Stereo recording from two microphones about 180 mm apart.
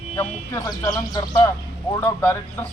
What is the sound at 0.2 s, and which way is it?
Speech, 20° left (ahead or behind).